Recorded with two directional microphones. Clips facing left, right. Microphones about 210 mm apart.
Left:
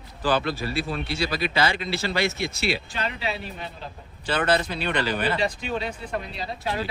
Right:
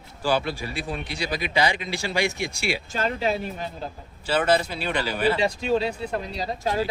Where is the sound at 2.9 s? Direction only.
45° right (ahead or behind).